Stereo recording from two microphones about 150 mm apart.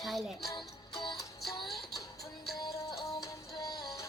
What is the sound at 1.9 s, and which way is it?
Music, 20° left (ahead or behind).